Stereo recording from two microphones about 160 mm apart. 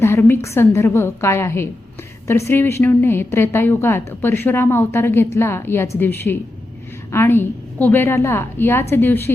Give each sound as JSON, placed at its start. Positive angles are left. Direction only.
{"t": 0.0, "sound": "a woman's voice", "side_deg": 15}